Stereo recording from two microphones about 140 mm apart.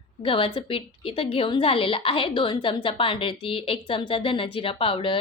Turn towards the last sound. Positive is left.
turn(degrees=40)  # may be behind; listen again after turning